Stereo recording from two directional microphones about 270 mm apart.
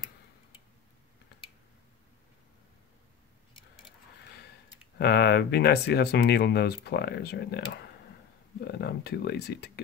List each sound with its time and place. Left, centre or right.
4.9 s speech: left